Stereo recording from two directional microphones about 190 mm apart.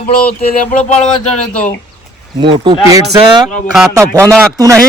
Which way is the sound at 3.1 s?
20° right (ahead or behind).